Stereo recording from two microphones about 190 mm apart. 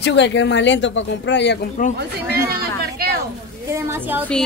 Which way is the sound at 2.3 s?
55° right (ahead or behind).